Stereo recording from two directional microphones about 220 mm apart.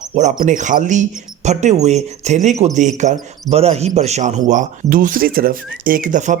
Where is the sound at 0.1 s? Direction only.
30° right (ahead or behind).